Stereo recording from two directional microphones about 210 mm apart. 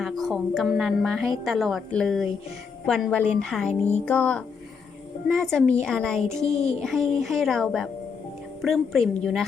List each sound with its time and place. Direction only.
0.0 s a woman's voice: centre (ahead or behind)
6.4 s a sound: 30° left (ahead or behind)
6.8 s a woman's voice: centre (ahead or behind)